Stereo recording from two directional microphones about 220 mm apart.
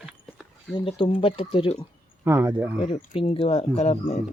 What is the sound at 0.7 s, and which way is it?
Speech, 25° left (ahead or behind).